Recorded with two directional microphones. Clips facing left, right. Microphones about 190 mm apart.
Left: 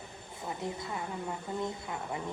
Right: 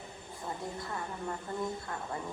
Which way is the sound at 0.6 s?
20° left (ahead or behind).